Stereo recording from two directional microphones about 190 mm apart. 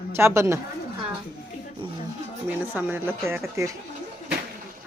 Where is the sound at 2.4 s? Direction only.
10° right (ahead or behind).